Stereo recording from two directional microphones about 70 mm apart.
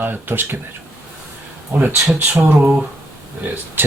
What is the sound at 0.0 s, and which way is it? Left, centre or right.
Speech, right.